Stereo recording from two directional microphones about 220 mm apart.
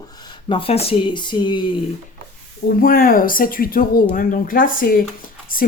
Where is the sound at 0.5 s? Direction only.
25° left (ahead or behind).